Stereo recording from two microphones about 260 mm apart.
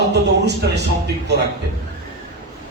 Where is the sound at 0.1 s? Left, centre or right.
Right.